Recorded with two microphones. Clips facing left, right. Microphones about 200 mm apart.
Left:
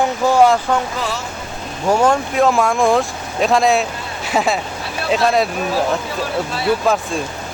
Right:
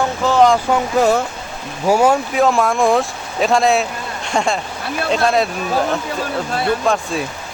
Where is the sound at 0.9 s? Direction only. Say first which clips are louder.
Right 10 dB; 50° right (ahead or behind).